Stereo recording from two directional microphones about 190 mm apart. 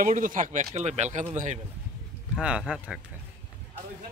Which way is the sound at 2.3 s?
Centre (ahead or behind).